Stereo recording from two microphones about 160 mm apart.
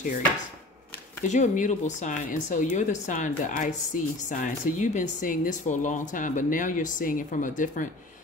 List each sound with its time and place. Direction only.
1.2 s speech: 50° left (ahead or behind)